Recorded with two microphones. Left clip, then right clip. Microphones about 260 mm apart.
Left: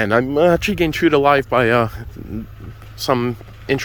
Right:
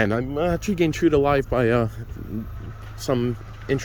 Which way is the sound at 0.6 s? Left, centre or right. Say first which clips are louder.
Left 4 dB; centre.